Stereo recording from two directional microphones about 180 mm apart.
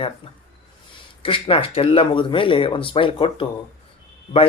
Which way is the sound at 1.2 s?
30° left (ahead or behind).